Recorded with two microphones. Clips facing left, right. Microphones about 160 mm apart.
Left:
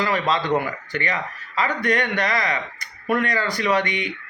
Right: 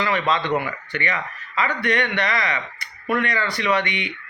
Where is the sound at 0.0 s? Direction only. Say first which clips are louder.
Even; 40° left (ahead or behind).